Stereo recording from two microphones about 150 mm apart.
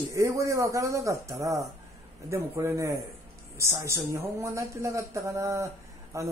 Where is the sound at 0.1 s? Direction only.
20° right (ahead or behind).